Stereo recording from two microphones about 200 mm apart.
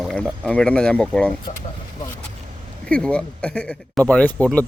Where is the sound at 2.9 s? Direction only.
5° left (ahead or behind).